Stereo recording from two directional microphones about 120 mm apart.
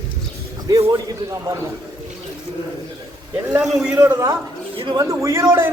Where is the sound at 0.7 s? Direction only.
30° right (ahead or behind).